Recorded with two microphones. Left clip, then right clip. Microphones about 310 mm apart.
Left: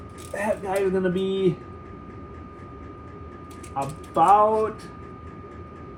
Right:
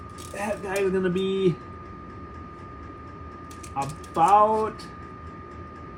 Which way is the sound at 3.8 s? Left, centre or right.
Centre.